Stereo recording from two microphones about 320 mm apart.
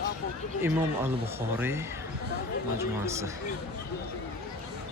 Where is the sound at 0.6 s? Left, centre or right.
Centre.